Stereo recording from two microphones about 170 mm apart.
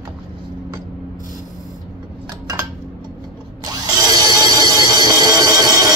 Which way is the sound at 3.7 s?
20° right (ahead or behind).